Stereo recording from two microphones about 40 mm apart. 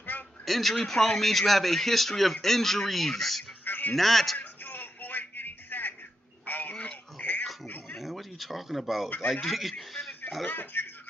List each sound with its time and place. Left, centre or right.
0.0 s a sound: left
0.4 s speech: centre
3.6 s music: left
3.9 s speech: centre
4.4 s a sound: left
6.4 s radio: left
6.7 s goat: left
7.9 s a sound: centre
9.2 s speech: centre
10.7 s music: left